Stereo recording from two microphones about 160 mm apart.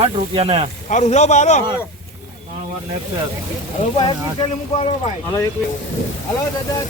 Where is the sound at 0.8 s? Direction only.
45° left (ahead or behind).